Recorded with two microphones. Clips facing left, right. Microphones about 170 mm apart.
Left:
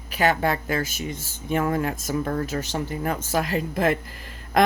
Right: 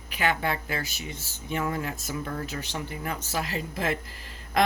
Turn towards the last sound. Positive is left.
turn(degrees=50)  # may be behind; listen again after turning